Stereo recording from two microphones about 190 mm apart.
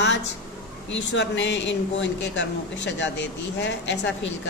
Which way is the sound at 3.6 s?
70° left (ahead or behind).